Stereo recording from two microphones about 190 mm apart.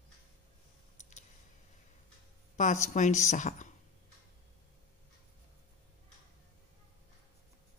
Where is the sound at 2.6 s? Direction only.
40° left (ahead or behind).